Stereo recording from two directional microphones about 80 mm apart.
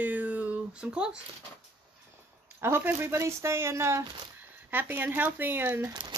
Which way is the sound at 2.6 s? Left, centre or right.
Right.